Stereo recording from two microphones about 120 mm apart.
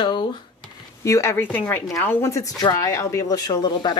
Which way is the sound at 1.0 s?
25° left (ahead or behind).